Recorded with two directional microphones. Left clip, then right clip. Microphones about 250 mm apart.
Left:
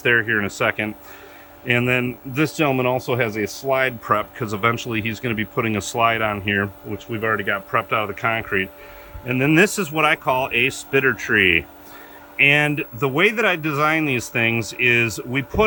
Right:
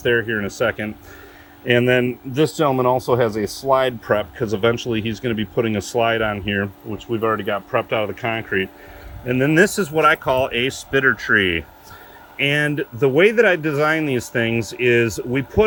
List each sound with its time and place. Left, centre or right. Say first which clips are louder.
0.0 s speech: left 1 dB; centre
7.1 s speech: right 1 dB; left
7.7 s speech: right 2 dB; centre